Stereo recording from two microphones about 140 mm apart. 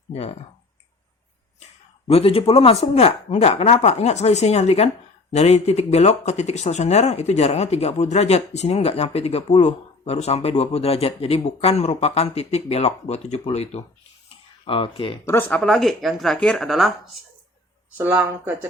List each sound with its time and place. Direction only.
0.1 s speech: 45° left (ahead or behind)
2.0 s speech: 45° left (ahead or behind)
15.3 s speech: 15° left (ahead or behind)
17.9 s speech: 15° right (ahead or behind)